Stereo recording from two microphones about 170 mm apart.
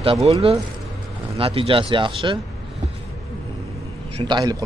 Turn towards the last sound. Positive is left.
turn(degrees=-25)  # may be behind; listen again after turning